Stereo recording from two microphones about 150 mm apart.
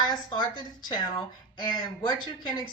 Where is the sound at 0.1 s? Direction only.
30° left (ahead or behind).